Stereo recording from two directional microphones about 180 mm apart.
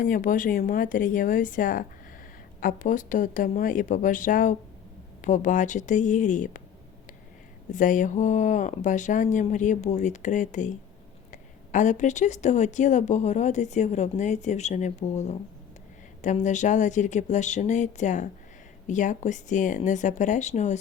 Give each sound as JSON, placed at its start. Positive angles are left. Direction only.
{"t": 0.0, "sound": "speech", "side_deg": 50}
{"t": 7.7, "sound": "speech", "side_deg": 45}